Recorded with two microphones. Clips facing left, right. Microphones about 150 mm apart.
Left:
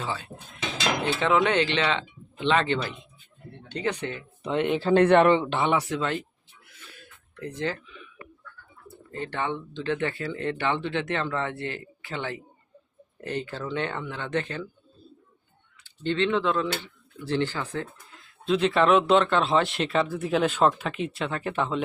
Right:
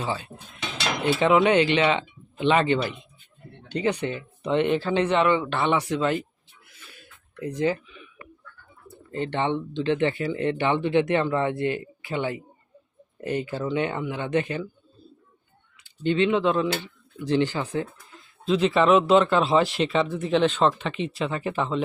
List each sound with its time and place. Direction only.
1.0 s speech: 15° right (ahead or behind)
4.4 s speech: 5° left (ahead or behind)
4.9 s a man's voice: 50° left (ahead or behind)
5.5 s speech: 15° left (ahead or behind)
5.9 s speech: 5° right (ahead or behind)
7.4 s speech: 15° right (ahead or behind)
9.1 s speech: 25° right (ahead or behind)
15.8 s speech: 15° right (ahead or behind)
18.4 s speech: centre (ahead or behind)